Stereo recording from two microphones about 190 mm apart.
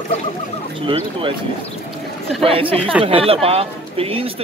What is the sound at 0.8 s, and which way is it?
Speech, 25° right (ahead or behind).